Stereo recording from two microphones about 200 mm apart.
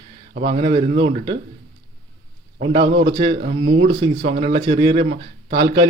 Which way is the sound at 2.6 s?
65° right (ahead or behind).